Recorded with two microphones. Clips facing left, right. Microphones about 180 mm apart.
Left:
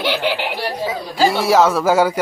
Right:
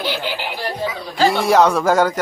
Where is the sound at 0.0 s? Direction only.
70° left (ahead or behind).